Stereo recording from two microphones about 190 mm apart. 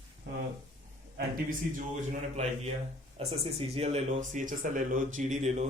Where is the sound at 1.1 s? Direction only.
45° right (ahead or behind).